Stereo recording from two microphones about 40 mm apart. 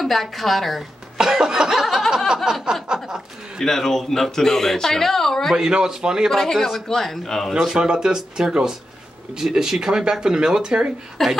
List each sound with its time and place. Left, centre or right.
0.0 s a woman's voice: centre
1.1 s music: centre
2.6 s chuckle: centre
3.5 s speech: centre
5.5 s speech: centre
6.3 s speech: centre
7.7 s speech: centre
11.2 s a woman's voice: centre